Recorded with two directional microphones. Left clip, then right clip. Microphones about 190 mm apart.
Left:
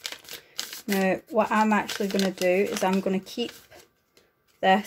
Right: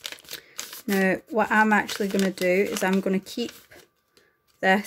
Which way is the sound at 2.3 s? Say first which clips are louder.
Even; 25° right (ahead or behind).